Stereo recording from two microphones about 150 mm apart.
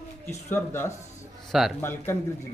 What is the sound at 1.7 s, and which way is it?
Speech, 15° left (ahead or behind).